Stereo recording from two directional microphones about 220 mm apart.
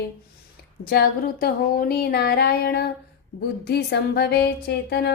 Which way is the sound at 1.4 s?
40° left (ahead or behind).